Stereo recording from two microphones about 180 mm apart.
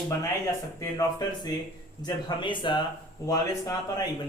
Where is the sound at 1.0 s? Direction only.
20° left (ahead or behind).